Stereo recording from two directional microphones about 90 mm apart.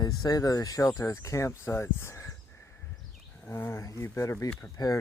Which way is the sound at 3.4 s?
25° left (ahead or behind).